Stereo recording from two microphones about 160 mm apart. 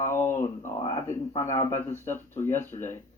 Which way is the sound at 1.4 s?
15° left (ahead or behind).